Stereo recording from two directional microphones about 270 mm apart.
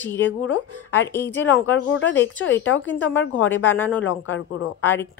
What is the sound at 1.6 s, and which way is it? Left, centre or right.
Speech, left.